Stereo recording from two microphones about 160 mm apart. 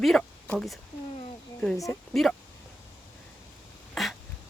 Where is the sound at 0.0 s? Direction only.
5° left (ahead or behind).